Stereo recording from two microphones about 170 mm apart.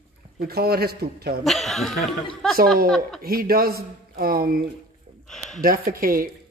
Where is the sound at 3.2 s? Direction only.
60° right (ahead or behind).